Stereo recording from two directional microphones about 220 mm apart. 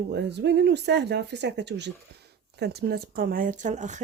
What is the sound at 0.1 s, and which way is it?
A woman's voice, 50° right (ahead or behind).